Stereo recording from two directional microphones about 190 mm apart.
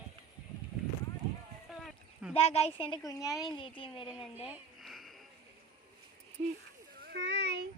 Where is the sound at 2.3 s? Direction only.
30° left (ahead or behind).